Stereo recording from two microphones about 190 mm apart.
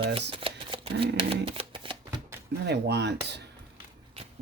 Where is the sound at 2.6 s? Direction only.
65° right (ahead or behind).